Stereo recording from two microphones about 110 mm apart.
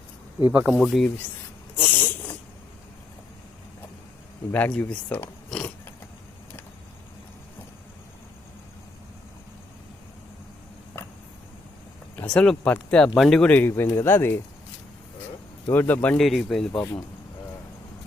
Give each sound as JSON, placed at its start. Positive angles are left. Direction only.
{"t": 0.4, "sound": "speech", "side_deg": -15}
{"t": 0.7, "sound": "speech", "side_deg": 5}
{"t": 1.7, "sound": "snort", "side_deg": 15}
{"t": 4.5, "sound": "speech", "side_deg": 15}
{"t": 12.1, "sound": "speech", "side_deg": 10}
{"t": 13.5, "sound": "speech", "side_deg": 20}
{"t": 15.7, "sound": "speech", "side_deg": 15}
{"t": 16.1, "sound": "speech", "side_deg": 5}